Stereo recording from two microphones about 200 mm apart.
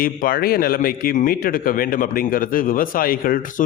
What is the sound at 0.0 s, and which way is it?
A man's voice, 45° left (ahead or behind).